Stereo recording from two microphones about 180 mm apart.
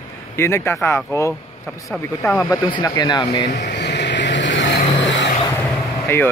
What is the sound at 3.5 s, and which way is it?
Vehicle, 75° left (ahead or behind).